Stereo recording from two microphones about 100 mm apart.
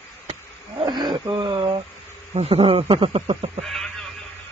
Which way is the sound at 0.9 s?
50° right (ahead or behind).